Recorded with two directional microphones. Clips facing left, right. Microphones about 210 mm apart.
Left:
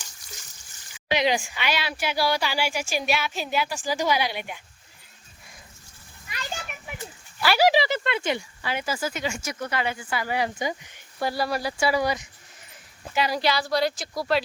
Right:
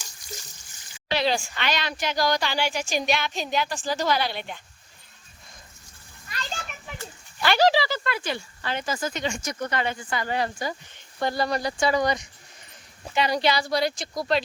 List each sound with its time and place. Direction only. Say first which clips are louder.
1.1 s a woman's voice: left 1 dB; 15° left (ahead or behind)
6.3 s children playing: even; 10° left (ahead or behind)
8.6 s a woman's voice: right 1 dB; 10° left (ahead or behind)